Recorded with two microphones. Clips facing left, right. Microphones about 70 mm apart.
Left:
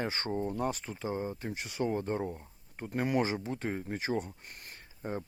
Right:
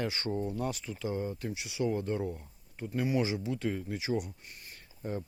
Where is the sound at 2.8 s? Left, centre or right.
Left.